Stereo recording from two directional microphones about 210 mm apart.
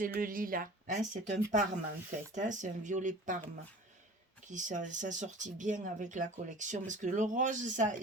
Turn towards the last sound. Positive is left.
turn(degrees=-35)  # may be behind; listen again after turning